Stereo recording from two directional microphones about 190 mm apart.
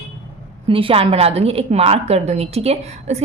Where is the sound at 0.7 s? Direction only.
30° right (ahead or behind).